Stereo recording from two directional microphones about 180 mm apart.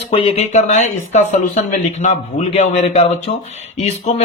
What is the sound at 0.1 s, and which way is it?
Speech, 30° left (ahead or behind).